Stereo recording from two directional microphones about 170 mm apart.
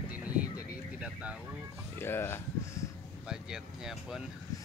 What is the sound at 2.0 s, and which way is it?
Speech, 15° left (ahead or behind).